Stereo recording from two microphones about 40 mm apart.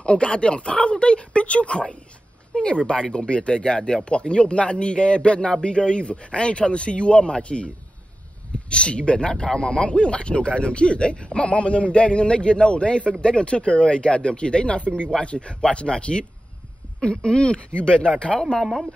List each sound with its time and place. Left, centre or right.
0.0 s speech: left
18.6 s speech: centre